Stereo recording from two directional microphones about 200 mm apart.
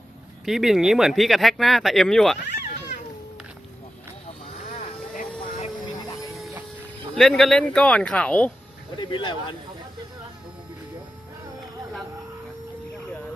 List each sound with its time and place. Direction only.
0.4 s speech: centre (ahead or behind)
4.7 s vehicle: 40° left (ahead or behind)
7.2 s speech: centre (ahead or behind)
9.0 s speech: 25° left (ahead or behind)